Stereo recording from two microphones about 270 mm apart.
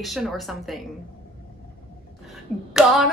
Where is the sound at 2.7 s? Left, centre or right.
Centre.